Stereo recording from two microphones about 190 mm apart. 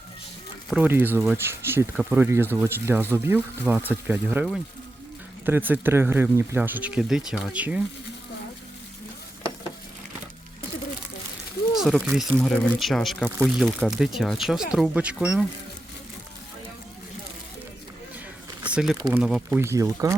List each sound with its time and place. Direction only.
0.7 s speech: 10° right (ahead or behind)
11.7 s a sound: centre (ahead or behind)
12.3 s speech: 5° left (ahead or behind)
18.7 s speech: 5° right (ahead or behind)
18.9 s speech: 20° right (ahead or behind)